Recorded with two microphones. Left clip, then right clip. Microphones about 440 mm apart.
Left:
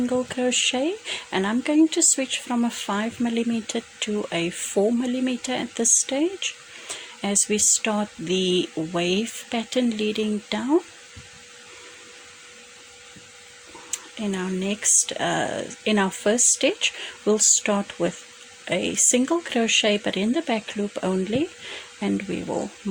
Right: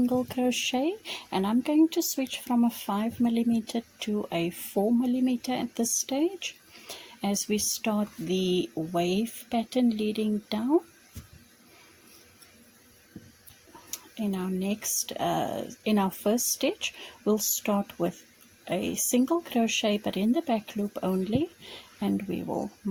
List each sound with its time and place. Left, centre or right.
0.0 s speech: right
13.9 s speech: right